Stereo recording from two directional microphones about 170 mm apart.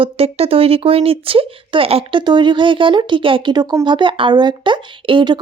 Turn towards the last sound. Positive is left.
turn(degrees=-30)  # may be behind; listen again after turning